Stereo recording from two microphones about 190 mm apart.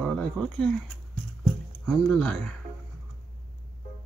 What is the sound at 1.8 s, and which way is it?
Speech, 5° left (ahead or behind).